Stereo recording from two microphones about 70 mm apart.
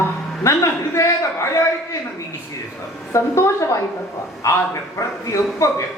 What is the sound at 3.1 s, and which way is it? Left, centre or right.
A man's voice, left.